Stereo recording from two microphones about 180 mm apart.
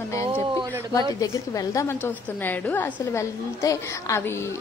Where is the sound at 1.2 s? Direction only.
20° left (ahead or behind).